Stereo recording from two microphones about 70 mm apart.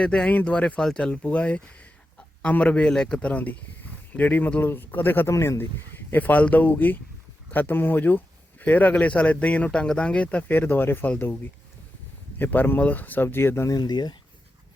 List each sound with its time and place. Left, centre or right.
0.0 s speech: centre; by 5.3 s left
5.3 s speech: left
12.4 s speech: left
13.7 s speech: left